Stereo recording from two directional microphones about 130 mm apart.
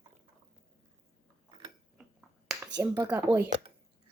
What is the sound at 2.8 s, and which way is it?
Speech, 20° right (ahead or behind).